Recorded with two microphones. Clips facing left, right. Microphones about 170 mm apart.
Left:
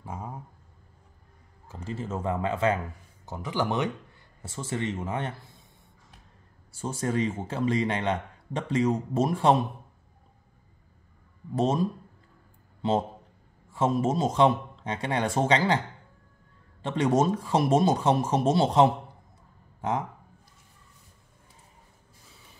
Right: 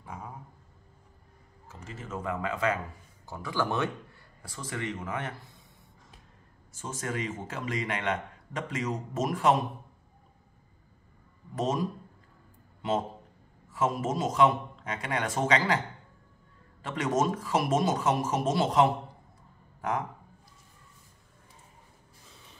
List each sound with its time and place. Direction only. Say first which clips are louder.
0.0 s a sound: left 4 dB; 30° left (ahead or behind)
1.7 s a man's voice: left 6 dB; 30° left (ahead or behind)
6.7 s speech: left 6 dB; 30° left (ahead or behind)
11.5 s a man's voice: left 4 dB; 30° left (ahead or behind)
13.7 s a man's voice: left 4 dB; 25° left (ahead or behind)
16.8 s a man's voice: left 4 dB; 30° left (ahead or behind)